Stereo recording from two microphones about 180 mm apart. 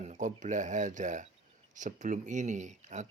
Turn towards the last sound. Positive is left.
turn(degrees=-40)  # may be behind; listen again after turning